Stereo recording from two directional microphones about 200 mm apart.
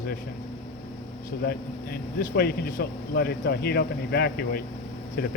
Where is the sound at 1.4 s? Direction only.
50° left (ahead or behind).